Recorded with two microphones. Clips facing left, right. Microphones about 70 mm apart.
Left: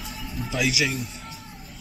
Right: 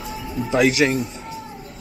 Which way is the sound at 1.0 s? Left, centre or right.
Centre.